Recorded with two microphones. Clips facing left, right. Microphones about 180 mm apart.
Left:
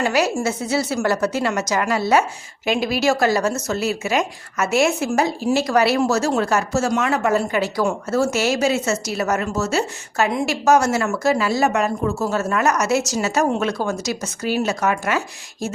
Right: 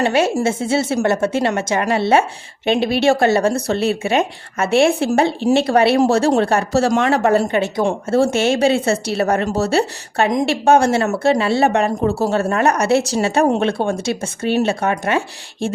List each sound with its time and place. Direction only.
0.0 s speech: 25° right (ahead or behind)